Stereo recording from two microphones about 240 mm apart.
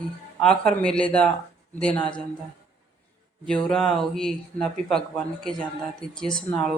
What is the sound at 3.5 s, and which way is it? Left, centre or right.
A woman's voice, centre.